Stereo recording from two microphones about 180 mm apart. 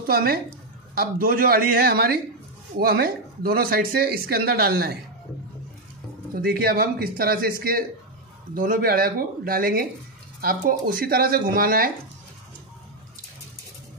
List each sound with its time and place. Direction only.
0.0 s speech: 55° right (ahead or behind)
6.3 s speech: 55° right (ahead or behind)